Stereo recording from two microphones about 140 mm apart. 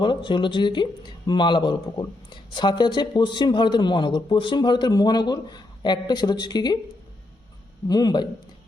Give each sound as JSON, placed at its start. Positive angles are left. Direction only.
{"t": 0.0, "sound": "speech", "side_deg": 35}
{"t": 7.9, "sound": "a man's voice", "side_deg": 30}